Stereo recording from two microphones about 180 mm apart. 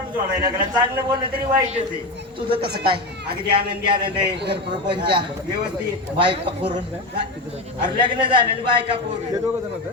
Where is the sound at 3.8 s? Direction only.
25° right (ahead or behind).